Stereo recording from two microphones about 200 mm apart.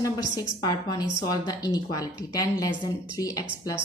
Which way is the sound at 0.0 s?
15° left (ahead or behind).